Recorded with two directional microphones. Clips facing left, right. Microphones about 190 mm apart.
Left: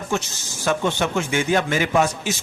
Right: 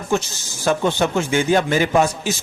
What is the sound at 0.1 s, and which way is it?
A man's voice, 35° right (ahead or behind).